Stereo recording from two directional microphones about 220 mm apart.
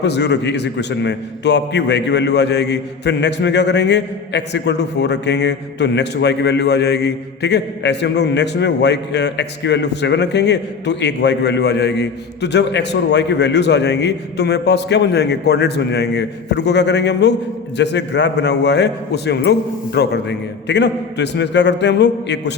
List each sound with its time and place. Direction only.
0.0 s a man's voice: 50° left (ahead or behind)